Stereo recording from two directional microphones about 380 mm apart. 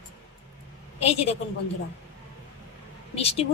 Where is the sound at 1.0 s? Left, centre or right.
Centre.